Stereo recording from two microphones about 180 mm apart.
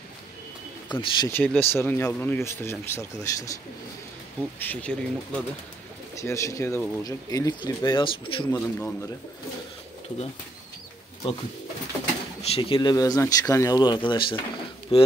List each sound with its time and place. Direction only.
0.9 s speech: 10° left (ahead or behind)
4.6 s speech: 10° left (ahead or behind); by 8.5 s 30° left (ahead or behind)
8.5 s speech: 10° left (ahead or behind)
12.4 s speech: 35° left (ahead or behind)